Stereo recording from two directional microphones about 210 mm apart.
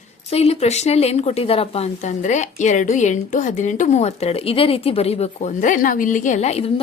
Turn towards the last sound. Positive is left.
turn(degrees=30)  # may be behind; listen again after turning